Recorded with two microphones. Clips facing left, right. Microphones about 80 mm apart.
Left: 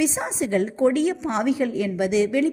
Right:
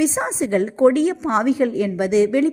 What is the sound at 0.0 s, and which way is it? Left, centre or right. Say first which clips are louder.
A woman's voice: right 4 dB; right.